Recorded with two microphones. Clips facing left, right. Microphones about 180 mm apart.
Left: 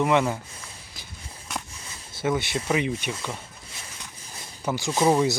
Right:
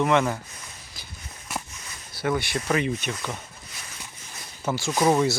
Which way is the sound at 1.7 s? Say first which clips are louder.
Even; 30° left (ahead or behind).